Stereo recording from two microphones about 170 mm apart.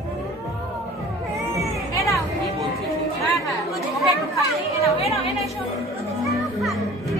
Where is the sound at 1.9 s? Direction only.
20° left (ahead or behind).